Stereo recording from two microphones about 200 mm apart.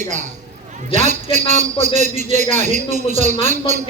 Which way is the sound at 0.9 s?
35° right (ahead or behind).